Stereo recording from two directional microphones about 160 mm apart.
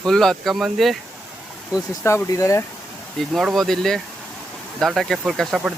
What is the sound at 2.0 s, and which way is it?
Speech, 15° left (ahead or behind).